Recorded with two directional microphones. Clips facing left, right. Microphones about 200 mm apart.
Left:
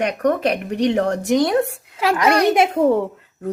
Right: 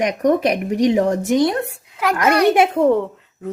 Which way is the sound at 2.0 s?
30° left (ahead or behind).